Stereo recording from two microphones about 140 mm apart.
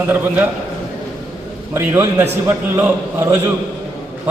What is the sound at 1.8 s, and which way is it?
A man's voice, 15° right (ahead or behind).